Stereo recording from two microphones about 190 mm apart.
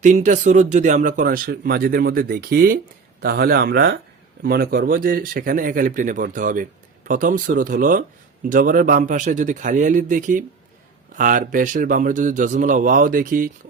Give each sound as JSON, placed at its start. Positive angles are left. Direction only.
{"t": 0.0, "sound": "speech", "side_deg": -40}